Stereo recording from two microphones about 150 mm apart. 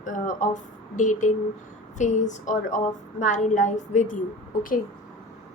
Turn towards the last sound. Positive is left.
turn(degrees=65)  # may be behind; listen again after turning